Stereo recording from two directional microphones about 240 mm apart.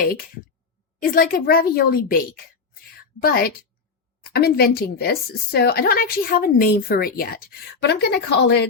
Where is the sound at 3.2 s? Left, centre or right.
Left.